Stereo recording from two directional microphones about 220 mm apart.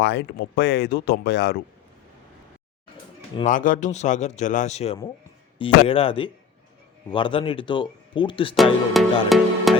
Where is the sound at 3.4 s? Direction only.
35° left (ahead or behind).